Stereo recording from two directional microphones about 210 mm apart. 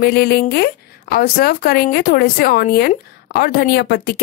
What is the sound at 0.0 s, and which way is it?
Speech, 50° left (ahead or behind).